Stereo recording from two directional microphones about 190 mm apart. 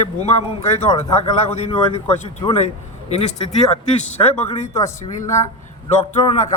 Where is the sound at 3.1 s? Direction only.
35° left (ahead or behind).